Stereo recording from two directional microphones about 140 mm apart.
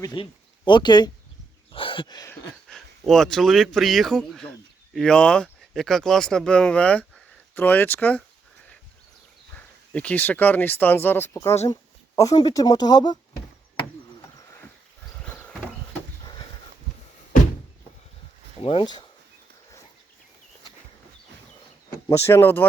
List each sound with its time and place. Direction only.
0.0 s speech: 35° left (ahead or behind)
1.7 s a sound: 40° left (ahead or behind)
2.6 s speech: centre (ahead or behind)
9.6 s speech: 10° left (ahead or behind); by 13.1 s 30° left (ahead or behind)
15.2 s horse: 10° left (ahead or behind)
16.2 s a sound: 30° left (ahead or behind)
18.6 s speech: 45° left (ahead or behind)
22.3 s speech: 15° left (ahead or behind)